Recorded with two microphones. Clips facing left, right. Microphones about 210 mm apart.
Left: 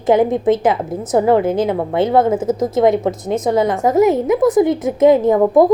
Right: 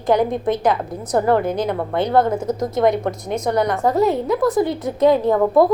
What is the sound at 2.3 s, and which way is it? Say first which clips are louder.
Speech: left 5 dB; 5° left (ahead or behind).